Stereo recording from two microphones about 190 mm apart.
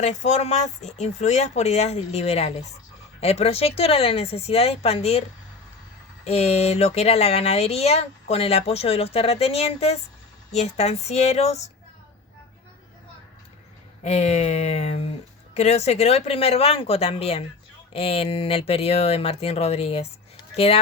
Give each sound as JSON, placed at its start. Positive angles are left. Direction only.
{"t": 0.0, "sound": "speech", "side_deg": 40}
{"t": 6.2, "sound": "speech", "side_deg": 35}
{"t": 14.0, "sound": "speech", "side_deg": 35}